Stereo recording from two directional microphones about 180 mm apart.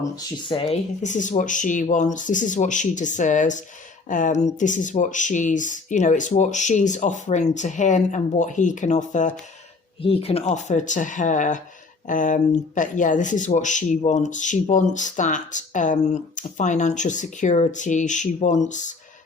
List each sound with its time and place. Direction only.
0.0 s speech: 30° left (ahead or behind); by 9.3 s 45° left (ahead or behind)
10.0 s speech: 30° left (ahead or behind)